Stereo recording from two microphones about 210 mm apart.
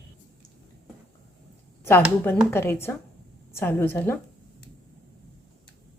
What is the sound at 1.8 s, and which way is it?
A woman's voice, 10° left (ahead or behind).